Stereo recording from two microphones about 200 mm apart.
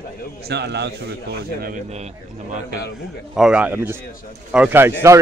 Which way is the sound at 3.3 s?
5° right (ahead or behind).